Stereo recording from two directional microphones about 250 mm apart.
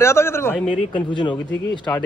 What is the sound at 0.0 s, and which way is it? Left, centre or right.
A man's voice, centre.